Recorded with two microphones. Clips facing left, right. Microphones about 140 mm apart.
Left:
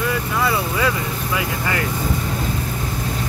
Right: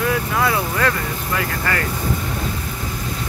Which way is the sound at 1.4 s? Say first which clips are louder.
Right 1 dB; 15° left (ahead or behind).